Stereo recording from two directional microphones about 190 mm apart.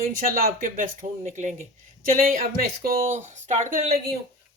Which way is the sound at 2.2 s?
50° right (ahead or behind).